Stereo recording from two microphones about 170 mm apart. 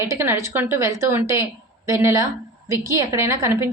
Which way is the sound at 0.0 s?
15° right (ahead or behind).